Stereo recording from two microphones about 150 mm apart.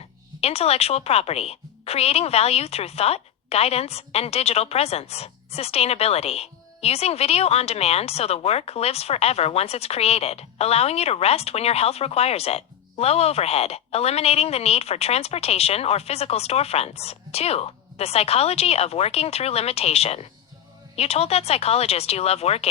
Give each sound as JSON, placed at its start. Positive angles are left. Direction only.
{"t": 0.4, "sound": "a woman's voice", "side_deg": 45}